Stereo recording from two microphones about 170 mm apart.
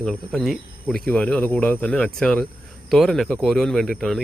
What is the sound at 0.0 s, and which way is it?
Speech, 5° left (ahead or behind).